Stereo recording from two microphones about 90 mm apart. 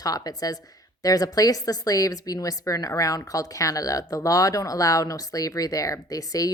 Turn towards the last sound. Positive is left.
turn(degrees=40)  # may be behind; listen again after turning